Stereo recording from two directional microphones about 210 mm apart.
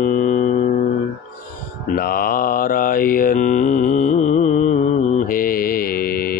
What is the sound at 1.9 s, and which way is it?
Mantra, 45° left (ahead or behind).